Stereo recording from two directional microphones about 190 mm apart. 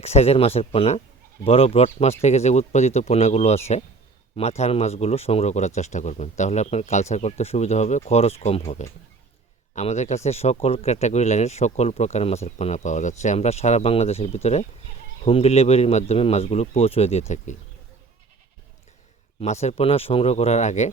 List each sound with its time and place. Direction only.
0.0 s speech: 35° left (ahead or behind)
19.4 s speech: 35° left (ahead or behind)